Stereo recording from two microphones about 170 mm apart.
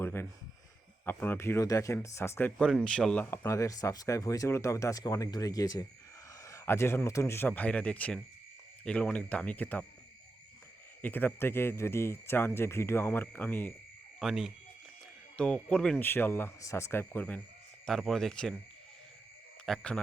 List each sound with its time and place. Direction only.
0.0 s speech: 15° left (ahead or behind)
2.6 s speech: 5° left (ahead or behind)
11.0 s speech: 10° left (ahead or behind)
14.2 s speech: centre (ahead or behind)
19.6 s speech: 5° left (ahead or behind)